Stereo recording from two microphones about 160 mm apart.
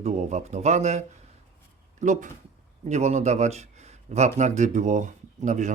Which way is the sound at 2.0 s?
50° right (ahead or behind).